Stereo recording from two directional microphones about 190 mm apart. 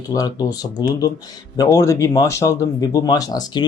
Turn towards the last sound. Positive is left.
turn(degrees=20)  # may be behind; listen again after turning